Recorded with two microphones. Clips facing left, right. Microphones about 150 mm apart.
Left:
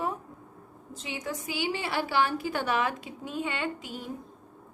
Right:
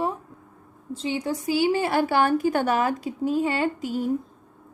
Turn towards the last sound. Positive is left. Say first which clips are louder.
# right 9 dB
turn(degrees=-45)  # may be behind; listen again after turning